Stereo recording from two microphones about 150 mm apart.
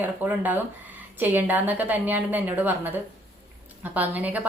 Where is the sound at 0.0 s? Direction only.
10° right (ahead or behind).